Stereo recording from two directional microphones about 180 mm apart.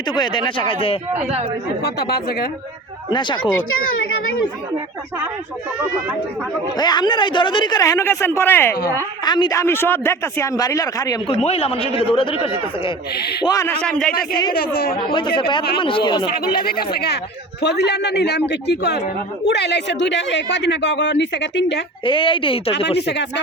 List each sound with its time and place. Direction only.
0.1 s a man's voice: 25° left (ahead or behind)
1.1 s speech: 40° right (ahead or behind)
1.8 s speech: 60° left (ahead or behind)
3.1 s a man's voice: 25° left (ahead or behind)
6.7 s a man's voice: 25° left (ahead or behind)
9.2 s a man's voice: 25° left (ahead or behind)
11.3 s a man's voice: 35° left (ahead or behind)
13.4 s a man's voice: 20° left (ahead or behind)
14.5 s speech: 55° left (ahead or behind)
14.9 s a man's voice: 30° left (ahead or behind)
16.3 s speech: 55° left (ahead or behind)
17.6 s speech: 70° left (ahead or behind)
22.0 s a man's voice: 30° left (ahead or behind)
23.0 s speech: 70° left (ahead or behind)